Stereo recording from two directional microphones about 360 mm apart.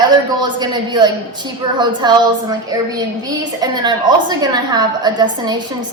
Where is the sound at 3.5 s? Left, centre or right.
Centre.